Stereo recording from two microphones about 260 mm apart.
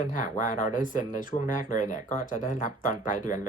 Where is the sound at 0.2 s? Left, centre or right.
Left.